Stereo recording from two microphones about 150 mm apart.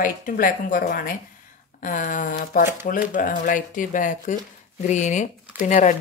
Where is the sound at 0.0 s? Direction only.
65° left (ahead or behind).